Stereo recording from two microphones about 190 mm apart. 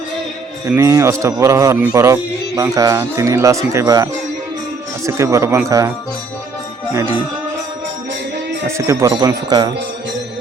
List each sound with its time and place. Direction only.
0.7 s a man's voice: 15° right (ahead or behind)
8.6 s a man's voice: 15° right (ahead or behind)